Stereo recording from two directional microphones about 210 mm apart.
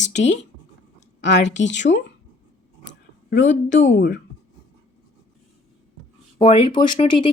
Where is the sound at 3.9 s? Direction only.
55° left (ahead or behind).